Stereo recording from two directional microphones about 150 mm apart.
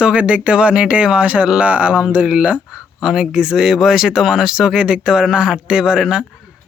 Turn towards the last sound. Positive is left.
turn(degrees=-5)  # may be behind; listen again after turning